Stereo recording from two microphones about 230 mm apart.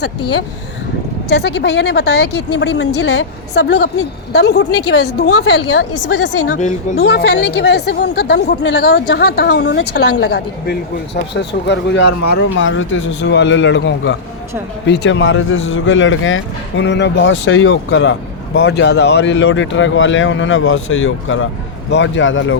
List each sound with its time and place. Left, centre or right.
1.3 s speech: left
2.5 s speech: left
4.7 s a woman's voice: left
5.0 s speech: left
6.0 s a woman's voice: left
7.0 s speech: left
18.7 s speech: left